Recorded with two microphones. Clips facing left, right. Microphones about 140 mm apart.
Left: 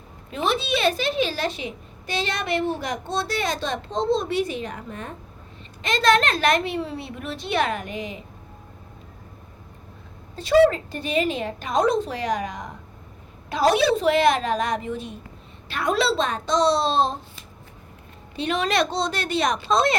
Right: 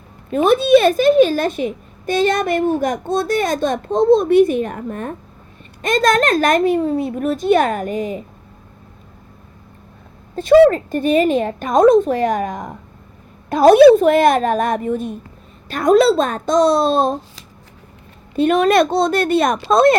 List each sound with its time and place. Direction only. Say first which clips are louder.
0.3 s a woman's voice: right 12 dB; 50° right (ahead or behind)
10.3 s a woman's voice: right 7 dB; 50° right (ahead or behind)
18.3 s a woman's voice: right 10 dB; 50° right (ahead or behind)